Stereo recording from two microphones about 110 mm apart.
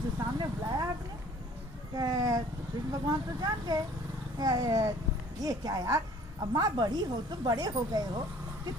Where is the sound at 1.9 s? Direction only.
35° right (ahead or behind).